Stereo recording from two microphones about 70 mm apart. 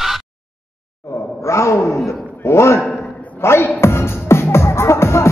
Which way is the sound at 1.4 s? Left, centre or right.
Left.